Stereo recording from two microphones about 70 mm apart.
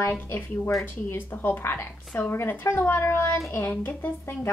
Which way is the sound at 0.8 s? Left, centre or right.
Left.